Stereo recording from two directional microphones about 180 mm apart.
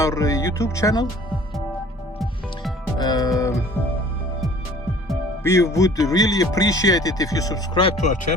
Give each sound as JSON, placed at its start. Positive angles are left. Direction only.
{"t": 0.0, "sound": "speech", "side_deg": 15}
{"t": 3.0, "sound": "music", "side_deg": 20}
{"t": 5.4, "sound": "speech", "side_deg": 15}